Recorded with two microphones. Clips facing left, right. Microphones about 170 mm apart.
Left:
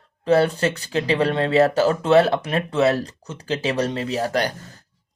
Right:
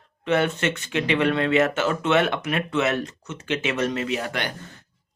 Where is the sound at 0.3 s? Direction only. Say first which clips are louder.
Left 4 dB; 35° left (ahead or behind).